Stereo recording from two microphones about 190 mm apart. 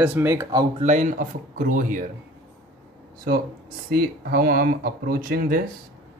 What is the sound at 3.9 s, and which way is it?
Speech, 50° right (ahead or behind).